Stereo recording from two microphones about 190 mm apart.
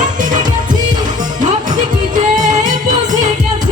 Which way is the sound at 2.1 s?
40° right (ahead or behind).